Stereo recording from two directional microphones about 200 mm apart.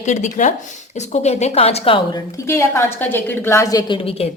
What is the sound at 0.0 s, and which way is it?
Speech, 35° left (ahead or behind).